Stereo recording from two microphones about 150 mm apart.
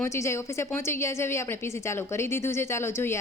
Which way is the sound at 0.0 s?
20° left (ahead or behind).